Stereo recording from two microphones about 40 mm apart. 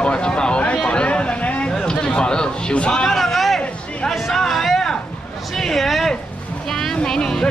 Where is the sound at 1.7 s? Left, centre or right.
Centre.